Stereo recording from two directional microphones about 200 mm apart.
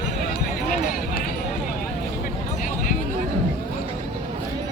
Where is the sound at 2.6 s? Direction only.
40° left (ahead or behind).